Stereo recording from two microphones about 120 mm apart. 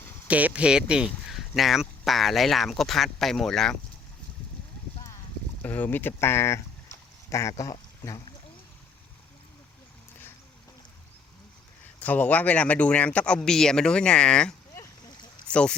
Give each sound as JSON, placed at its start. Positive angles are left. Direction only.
{"t": 0.3, "sound": "speech", "side_deg": -10}
{"t": 5.6, "sound": "speech", "side_deg": 15}
{"t": 6.9, "sound": "a sound", "side_deg": 25}
{"t": 11.9, "sound": "speech", "side_deg": 15}